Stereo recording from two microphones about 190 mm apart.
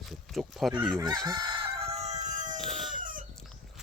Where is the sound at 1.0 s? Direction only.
20° right (ahead or behind).